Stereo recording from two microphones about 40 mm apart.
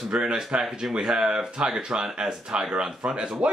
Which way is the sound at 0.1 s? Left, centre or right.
Right.